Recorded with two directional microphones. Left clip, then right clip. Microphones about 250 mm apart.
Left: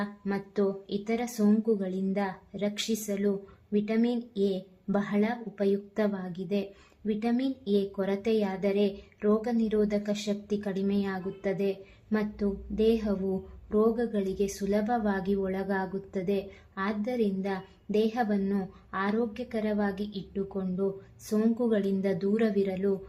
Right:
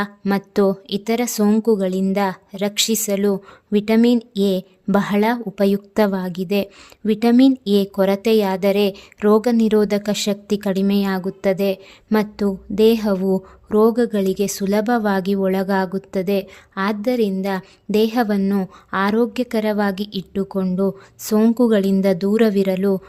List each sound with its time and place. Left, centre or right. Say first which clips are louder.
0.0 s a woman's voice: right 12 dB; right